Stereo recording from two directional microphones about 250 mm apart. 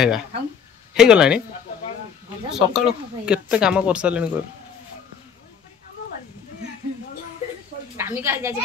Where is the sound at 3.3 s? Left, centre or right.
Centre.